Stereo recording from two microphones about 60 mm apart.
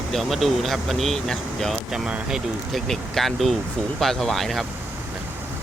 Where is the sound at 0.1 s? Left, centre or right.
Centre.